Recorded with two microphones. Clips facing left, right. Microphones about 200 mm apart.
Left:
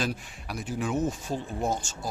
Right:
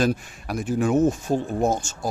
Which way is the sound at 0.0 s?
45° right (ahead or behind).